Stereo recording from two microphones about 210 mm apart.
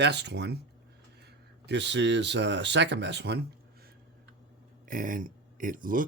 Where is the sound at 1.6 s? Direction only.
55° right (ahead or behind).